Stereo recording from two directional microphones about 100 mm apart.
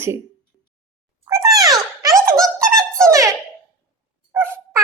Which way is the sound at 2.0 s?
35° right (ahead or behind).